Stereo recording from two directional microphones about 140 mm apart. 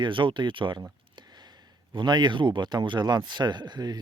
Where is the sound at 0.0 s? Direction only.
35° right (ahead or behind).